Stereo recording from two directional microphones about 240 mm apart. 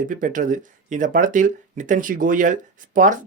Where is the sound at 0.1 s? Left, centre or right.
Right.